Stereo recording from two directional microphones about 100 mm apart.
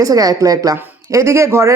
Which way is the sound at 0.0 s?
35° right (ahead or behind).